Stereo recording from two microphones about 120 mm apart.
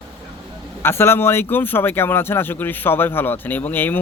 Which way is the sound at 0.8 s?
20° left (ahead or behind).